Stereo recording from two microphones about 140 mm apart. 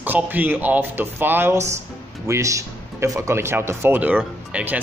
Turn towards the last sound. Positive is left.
turn(degrees=-10)  # may be behind; listen again after turning